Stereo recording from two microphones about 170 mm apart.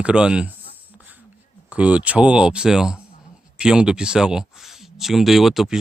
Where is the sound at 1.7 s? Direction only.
10° right (ahead or behind).